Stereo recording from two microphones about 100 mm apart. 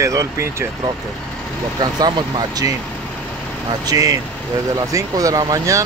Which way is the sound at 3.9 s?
35° right (ahead or behind).